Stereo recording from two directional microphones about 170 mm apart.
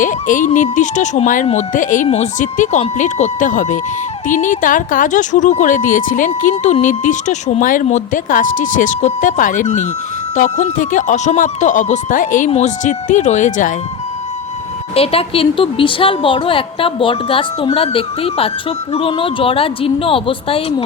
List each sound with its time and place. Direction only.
0.0 s speech: 50° left (ahead or behind)
14.9 s a woman's voice: 35° left (ahead or behind)